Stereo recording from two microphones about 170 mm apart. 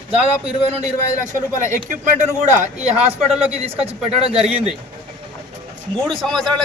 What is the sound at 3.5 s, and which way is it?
Speech, 35° right (ahead or behind).